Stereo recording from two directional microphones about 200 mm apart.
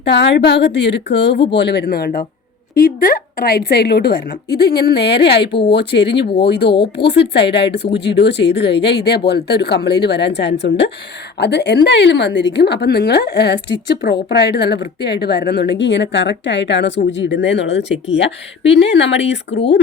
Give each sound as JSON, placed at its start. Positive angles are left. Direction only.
{"t": 0.0, "sound": "a woman's voice", "side_deg": 60}